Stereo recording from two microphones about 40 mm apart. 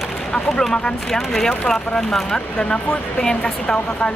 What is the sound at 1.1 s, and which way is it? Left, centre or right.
Speech, centre.